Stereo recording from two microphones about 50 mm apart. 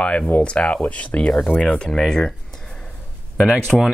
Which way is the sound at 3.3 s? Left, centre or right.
Centre.